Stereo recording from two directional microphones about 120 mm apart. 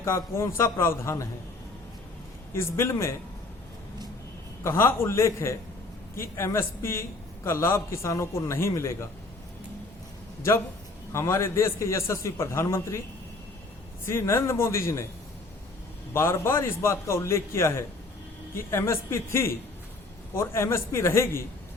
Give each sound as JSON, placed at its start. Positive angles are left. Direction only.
{"t": 0.0, "sound": "a man's voice", "side_deg": 25}
{"t": 2.5, "sound": "a man's voice", "side_deg": 20}
{"t": 4.6, "sound": "a man's voice", "side_deg": 20}
{"t": 11.1, "sound": "a man's voice", "side_deg": 20}
{"t": 14.0, "sound": "a man's voice", "side_deg": 20}
{"t": 16.1, "sound": "a man's voice", "side_deg": 20}